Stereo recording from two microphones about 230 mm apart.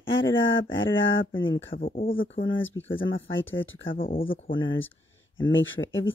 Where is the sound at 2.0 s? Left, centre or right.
Left.